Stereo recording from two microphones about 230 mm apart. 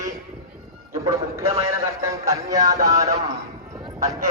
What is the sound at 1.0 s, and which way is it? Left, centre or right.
Music, centre.